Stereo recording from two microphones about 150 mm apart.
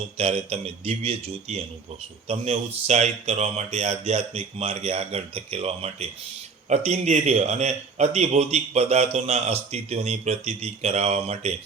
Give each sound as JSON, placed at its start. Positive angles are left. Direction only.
{"t": 0.2, "sound": "a man's voice", "side_deg": -45}